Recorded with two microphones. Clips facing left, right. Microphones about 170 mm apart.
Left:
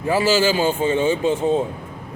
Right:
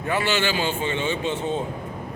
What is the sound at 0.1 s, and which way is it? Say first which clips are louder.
A man's voice: left 6 dB; 35° left (ahead or behind).